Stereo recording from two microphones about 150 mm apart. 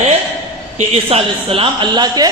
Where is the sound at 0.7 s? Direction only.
40° right (ahead or behind).